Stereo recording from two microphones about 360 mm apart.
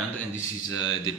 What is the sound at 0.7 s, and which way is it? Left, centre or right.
Speech, centre.